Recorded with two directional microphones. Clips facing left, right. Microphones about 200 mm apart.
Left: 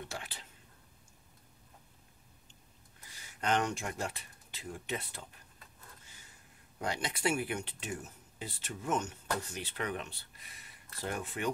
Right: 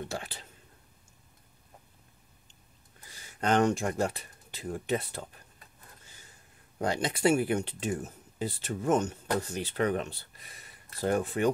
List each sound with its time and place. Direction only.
0.1 s speech: 35° right (ahead or behind)
3.3 s speech: 40° right (ahead or behind)
6.8 s speech: 35° right (ahead or behind)